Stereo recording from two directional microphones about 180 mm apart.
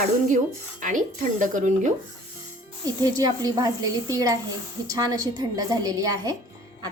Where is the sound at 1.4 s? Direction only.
45° right (ahead or behind).